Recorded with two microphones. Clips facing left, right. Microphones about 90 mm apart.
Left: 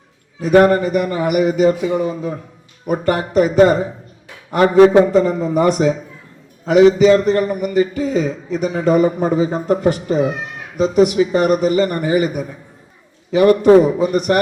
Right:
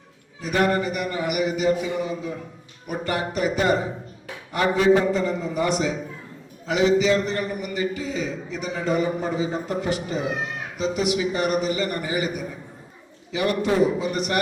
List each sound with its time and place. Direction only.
0.4 s a man's voice: 45° left (ahead or behind)